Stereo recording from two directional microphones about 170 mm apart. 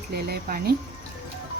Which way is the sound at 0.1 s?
70° right (ahead or behind).